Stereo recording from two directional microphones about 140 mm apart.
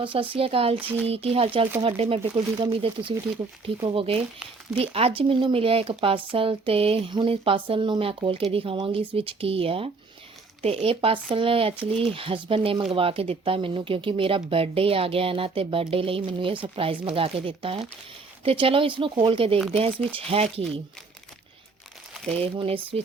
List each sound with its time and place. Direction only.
0.0 s speech: 40° right (ahead or behind)
0.8 s speech: 10° right (ahead or behind)
1.0 s speech: 45° right (ahead or behind)
22.3 s speech: 45° right (ahead or behind)